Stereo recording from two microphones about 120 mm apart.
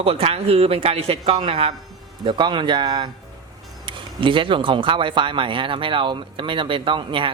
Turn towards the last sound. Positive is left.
turn(degrees=-45)  # may be behind; listen again after turning